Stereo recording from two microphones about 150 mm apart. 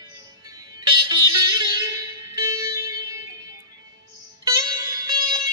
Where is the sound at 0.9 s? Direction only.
25° right (ahead or behind).